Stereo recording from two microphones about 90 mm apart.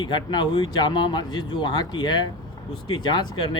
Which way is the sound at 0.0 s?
60° left (ahead or behind).